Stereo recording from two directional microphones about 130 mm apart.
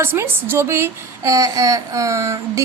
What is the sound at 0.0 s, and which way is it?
A woman's voice, 20° right (ahead or behind).